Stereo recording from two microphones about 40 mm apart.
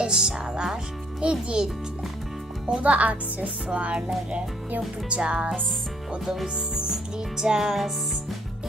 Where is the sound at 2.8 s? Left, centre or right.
Right.